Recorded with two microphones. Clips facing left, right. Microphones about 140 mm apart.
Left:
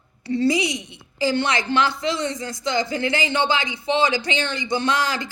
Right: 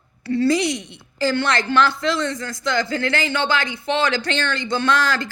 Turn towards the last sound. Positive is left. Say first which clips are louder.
# right 3 dB
turn(degrees=15)  # may be behind; listen again after turning